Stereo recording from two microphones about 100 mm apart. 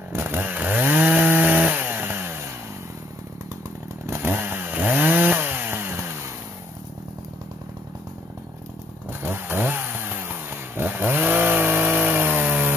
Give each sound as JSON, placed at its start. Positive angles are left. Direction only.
{"t": 0.1, "sound": "chainsaw", "side_deg": -20}
{"t": 4.0, "sound": "chainsaw", "side_deg": -25}
{"t": 9.2, "sound": "chainsaw", "side_deg": -20}